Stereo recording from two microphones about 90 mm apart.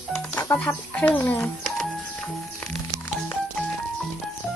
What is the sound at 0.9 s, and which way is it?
Speech, 15° left (ahead or behind).